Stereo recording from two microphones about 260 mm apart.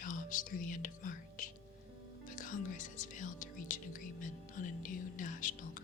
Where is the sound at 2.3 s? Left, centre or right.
Left.